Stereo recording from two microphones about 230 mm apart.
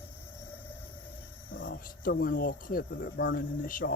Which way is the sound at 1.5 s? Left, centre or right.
Left.